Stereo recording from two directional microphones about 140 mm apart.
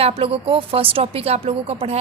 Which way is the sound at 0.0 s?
40° right (ahead or behind).